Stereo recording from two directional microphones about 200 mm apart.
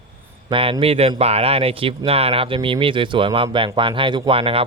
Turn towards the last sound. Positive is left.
turn(degrees=-30)  # may be behind; listen again after turning